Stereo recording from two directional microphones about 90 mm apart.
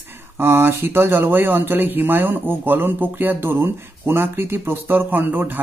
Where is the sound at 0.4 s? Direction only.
25° right (ahead or behind).